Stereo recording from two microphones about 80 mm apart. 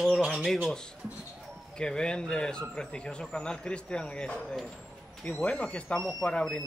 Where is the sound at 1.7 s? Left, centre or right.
Centre.